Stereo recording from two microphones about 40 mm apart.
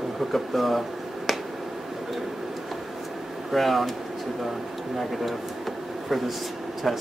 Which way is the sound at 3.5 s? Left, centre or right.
Centre.